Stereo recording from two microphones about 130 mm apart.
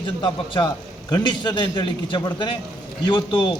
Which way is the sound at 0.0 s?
40° left (ahead or behind).